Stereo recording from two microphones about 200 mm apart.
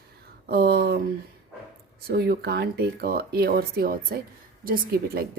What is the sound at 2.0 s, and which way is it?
Speech, 50° right (ahead or behind).